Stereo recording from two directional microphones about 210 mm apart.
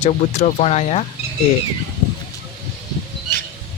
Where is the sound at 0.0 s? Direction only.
30° left (ahead or behind).